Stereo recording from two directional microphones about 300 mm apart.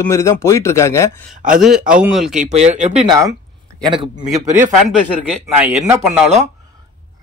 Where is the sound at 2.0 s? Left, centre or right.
Centre.